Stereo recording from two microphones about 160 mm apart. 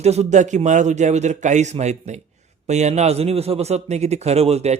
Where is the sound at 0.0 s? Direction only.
45° right (ahead or behind).